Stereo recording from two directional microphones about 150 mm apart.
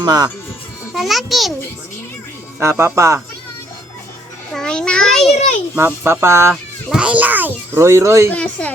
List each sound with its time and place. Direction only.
0.0 s speech: 25° right (ahead or behind)
0.9 s a child's voice: centre (ahead or behind)
2.6 s a child's voice: 15° right (ahead or behind)
4.5 s children playing: 5° left (ahead or behind)
5.3 s children playing: 45° left (ahead or behind)
5.7 s a child's voice: 15° right (ahead or behind)
6.5 s a child's voice: 5° right (ahead or behind)
8.3 s speech: 10° left (ahead or behind)